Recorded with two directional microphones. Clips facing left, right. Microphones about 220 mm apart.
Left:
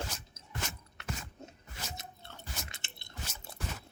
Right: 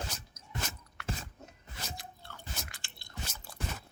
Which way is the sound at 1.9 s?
25° left (ahead or behind).